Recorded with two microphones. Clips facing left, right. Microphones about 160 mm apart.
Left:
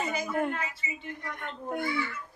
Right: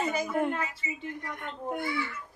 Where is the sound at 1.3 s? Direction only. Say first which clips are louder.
Even; 15° right (ahead or behind).